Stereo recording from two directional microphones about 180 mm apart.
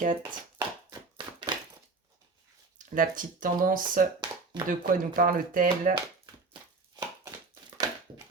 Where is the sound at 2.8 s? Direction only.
50° right (ahead or behind).